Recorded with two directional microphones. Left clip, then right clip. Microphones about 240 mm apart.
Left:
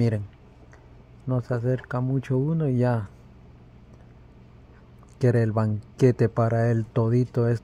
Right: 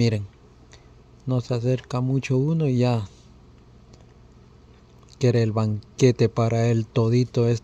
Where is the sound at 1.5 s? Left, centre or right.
Right.